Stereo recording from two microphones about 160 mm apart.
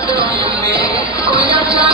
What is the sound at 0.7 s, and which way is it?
Music, 20° left (ahead or behind).